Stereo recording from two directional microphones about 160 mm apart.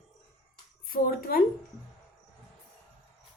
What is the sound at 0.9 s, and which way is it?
Speech, 65° left (ahead or behind).